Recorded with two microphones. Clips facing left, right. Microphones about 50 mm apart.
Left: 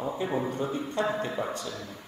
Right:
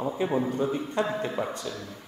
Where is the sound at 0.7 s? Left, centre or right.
Centre.